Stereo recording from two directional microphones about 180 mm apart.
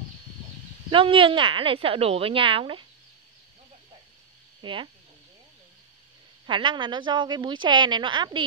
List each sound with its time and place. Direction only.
0.8 s a woman's voice: 30° right (ahead or behind)
4.6 s speech: 25° right (ahead or behind)
6.4 s a woman's voice: 25° right (ahead or behind)